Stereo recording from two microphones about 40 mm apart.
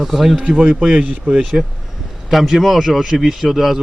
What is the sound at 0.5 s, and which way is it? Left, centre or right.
Speech, right.